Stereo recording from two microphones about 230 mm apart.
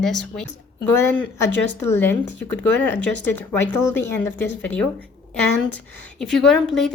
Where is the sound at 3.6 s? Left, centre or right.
Centre.